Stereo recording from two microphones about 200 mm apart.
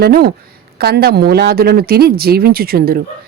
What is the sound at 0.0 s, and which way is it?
A woman's voice, 50° right (ahead or behind).